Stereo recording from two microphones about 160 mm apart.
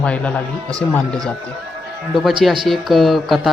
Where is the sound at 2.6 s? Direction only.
Centre (ahead or behind).